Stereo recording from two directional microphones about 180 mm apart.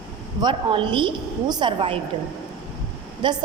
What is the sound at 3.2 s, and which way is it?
Speech, 25° right (ahead or behind).